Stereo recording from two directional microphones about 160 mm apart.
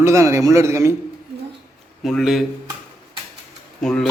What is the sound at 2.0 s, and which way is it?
Speech, centre (ahead or behind).